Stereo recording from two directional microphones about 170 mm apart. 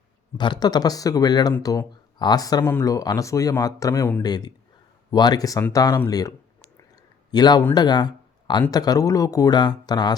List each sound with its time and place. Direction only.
0.3 s a man's voice: 25° left (ahead or behind)